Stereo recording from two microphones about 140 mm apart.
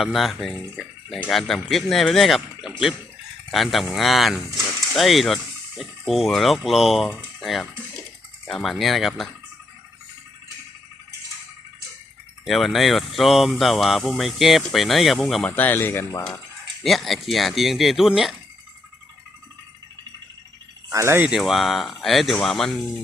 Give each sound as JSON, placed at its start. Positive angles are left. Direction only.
{"t": 0.0, "sound": "speech", "side_deg": 0}
{"t": 12.5, "sound": "speech", "side_deg": 0}
{"t": 15.4, "sound": "speech", "side_deg": 15}
{"t": 16.8, "sound": "speech", "side_deg": 0}
{"t": 20.9, "sound": "speech", "side_deg": -20}
{"t": 21.2, "sound": "speech", "side_deg": 0}